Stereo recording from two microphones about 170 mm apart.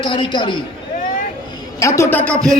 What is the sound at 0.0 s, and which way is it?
Speech, 30° left (ahead or behind).